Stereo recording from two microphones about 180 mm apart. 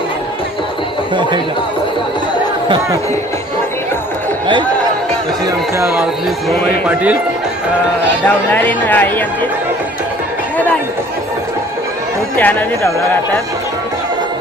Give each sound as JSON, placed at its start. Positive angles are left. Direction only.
{"t": 5.5, "sound": "speech", "side_deg": -15}
{"t": 8.5, "sound": "speech", "side_deg": 10}
{"t": 12.4, "sound": "speech", "side_deg": 10}